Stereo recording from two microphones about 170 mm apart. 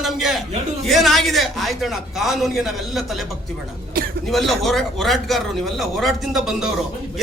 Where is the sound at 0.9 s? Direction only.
Centre (ahead or behind).